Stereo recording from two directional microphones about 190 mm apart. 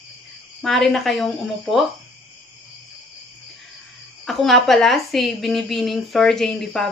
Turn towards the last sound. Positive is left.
turn(degrees=5)  # may be behind; listen again after turning